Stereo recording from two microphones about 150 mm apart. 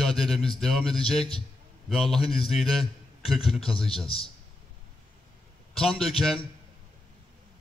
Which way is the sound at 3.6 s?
40° left (ahead or behind).